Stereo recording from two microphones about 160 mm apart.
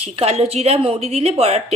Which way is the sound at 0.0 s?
40° right (ahead or behind).